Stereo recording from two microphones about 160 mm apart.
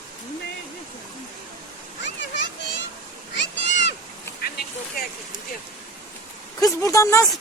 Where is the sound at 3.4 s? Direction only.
90° left.